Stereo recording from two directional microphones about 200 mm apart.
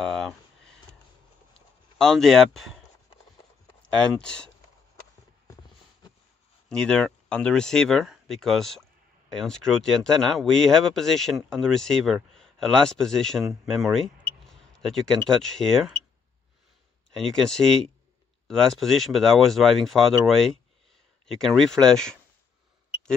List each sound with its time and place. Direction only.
0.0 s a sound: centre (ahead or behind)
2.0 s speech: centre (ahead or behind)
3.9 s speech: 5° left (ahead or behind)
6.7 s speech: 5° left (ahead or behind)
17.1 s speech: centre (ahead or behind)